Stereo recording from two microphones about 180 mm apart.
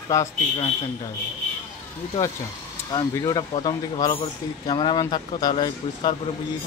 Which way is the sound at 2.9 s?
20° left (ahead or behind).